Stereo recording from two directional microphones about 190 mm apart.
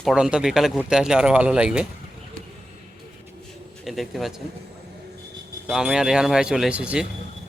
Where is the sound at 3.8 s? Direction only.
Centre (ahead or behind).